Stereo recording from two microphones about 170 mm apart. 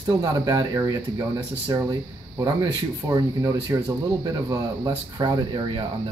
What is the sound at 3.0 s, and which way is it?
Speech, 20° right (ahead or behind).